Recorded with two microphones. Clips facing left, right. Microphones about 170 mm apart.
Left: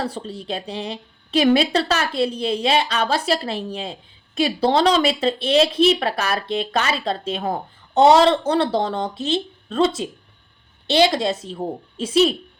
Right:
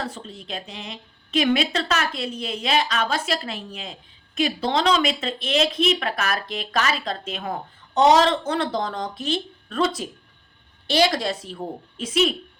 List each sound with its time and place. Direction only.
0.0 s a child's voice: 35° left (ahead or behind)